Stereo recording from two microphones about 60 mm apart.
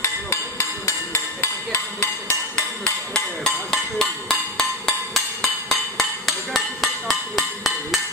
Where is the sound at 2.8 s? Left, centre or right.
Centre.